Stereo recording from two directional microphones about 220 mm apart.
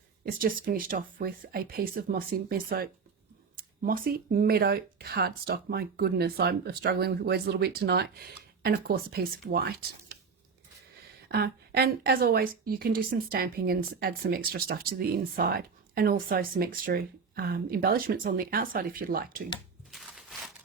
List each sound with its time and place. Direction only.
0.3 s a woman's voice: 40° right (ahead or behind)
11.3 s a woman's voice: 45° right (ahead or behind)
19.9 s a sound: centre (ahead or behind)